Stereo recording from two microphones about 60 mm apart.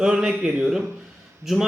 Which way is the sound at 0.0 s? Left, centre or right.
Centre.